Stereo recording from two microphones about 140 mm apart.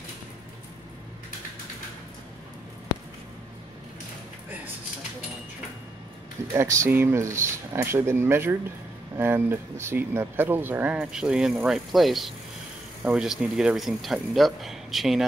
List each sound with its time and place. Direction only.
6.5 s speech: 20° right (ahead or behind); by 15.2 s centre (ahead or behind)